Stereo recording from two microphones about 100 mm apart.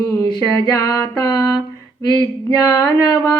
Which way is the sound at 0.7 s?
35° left (ahead or behind).